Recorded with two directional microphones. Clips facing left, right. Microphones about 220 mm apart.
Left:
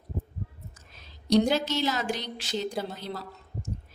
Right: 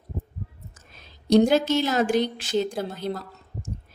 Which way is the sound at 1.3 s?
50° right (ahead or behind).